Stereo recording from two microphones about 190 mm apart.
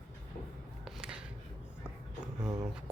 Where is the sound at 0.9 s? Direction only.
5° right (ahead or behind).